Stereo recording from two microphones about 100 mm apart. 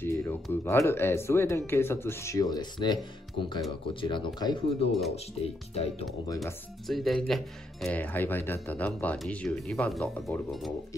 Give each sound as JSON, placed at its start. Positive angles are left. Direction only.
{"t": 0.0, "sound": "speech", "side_deg": 25}
{"t": 4.6, "sound": "speech", "side_deg": 80}
{"t": 6.2, "sound": "speech", "side_deg": 35}
{"t": 6.9, "sound": "speech", "side_deg": 0}
{"t": 7.9, "sound": "speech", "side_deg": 20}